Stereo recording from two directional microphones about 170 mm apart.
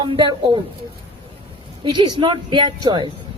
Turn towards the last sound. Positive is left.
turn(degrees=-25)  # may be behind; listen again after turning